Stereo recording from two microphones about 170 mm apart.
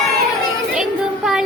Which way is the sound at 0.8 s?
Centre (ahead or behind).